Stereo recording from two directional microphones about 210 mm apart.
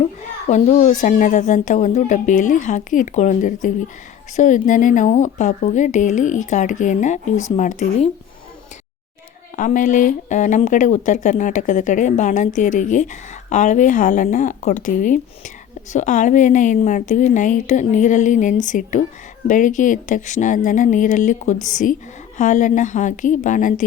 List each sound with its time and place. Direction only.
0.4 s speech: 35° left (ahead or behind)
9.6 s speech: 40° left (ahead or behind)